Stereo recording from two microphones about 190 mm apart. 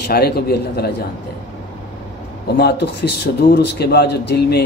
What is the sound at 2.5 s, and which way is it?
A man's voice, 60° left (ahead or behind).